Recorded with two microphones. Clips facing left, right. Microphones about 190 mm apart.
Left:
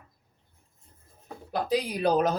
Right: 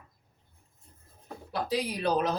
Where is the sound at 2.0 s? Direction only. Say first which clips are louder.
Left 4 dB; 45° left (ahead or behind).